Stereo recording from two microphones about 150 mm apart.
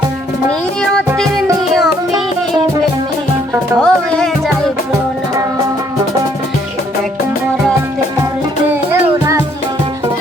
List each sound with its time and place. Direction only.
0.8 s music: 5° left (ahead or behind)
3.8 s speech: 5° left (ahead or behind)
8.7 s music: 20° right (ahead or behind)